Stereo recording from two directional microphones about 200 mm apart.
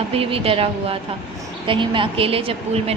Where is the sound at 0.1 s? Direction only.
30° right (ahead or behind).